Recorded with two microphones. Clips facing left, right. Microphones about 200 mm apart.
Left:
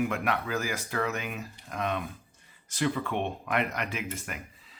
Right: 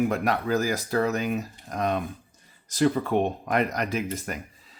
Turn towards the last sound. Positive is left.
turn(degrees=-40)  # may be behind; listen again after turning